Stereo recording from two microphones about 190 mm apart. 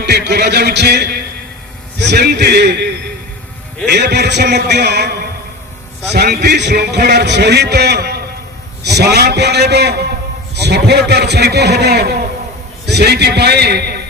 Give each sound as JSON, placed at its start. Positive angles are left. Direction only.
{"t": 0.0, "sound": "speech", "side_deg": -60}